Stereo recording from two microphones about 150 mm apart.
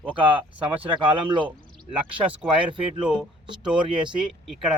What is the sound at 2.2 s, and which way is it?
Speech, 10° right (ahead or behind).